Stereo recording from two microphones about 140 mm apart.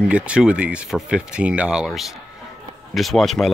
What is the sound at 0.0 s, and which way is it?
Speech, 10° right (ahead or behind).